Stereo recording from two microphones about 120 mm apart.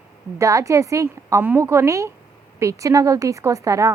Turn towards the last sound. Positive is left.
turn(degrees=-25)  # may be behind; listen again after turning